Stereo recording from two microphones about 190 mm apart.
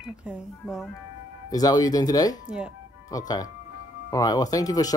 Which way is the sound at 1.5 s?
20° left (ahead or behind).